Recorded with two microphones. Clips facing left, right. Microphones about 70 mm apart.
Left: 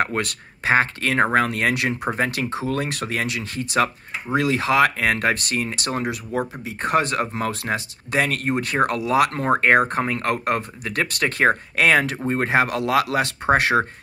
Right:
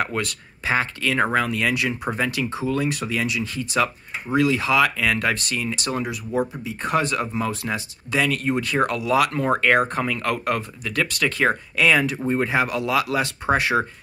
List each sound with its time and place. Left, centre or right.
0.0 s speech: left
1.7 s speech: left
2.1 s speech: left